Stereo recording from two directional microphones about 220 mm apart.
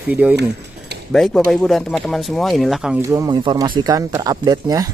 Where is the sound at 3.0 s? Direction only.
15° right (ahead or behind).